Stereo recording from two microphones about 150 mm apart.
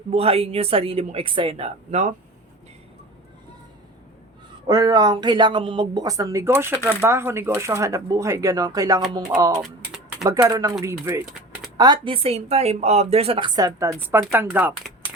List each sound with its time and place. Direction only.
0.1 s speech: 40° right (ahead or behind)
4.6 s speech: 25° right (ahead or behind)
9.6 s typing: centre (ahead or behind)
10.5 s speech: 25° right (ahead or behind)
11.8 s speech: 30° right (ahead or behind); by 14.8 s 10° right (ahead or behind)